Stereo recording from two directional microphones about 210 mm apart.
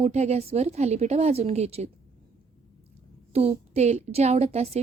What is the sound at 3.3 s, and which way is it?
A woman's voice, 30° right (ahead or behind).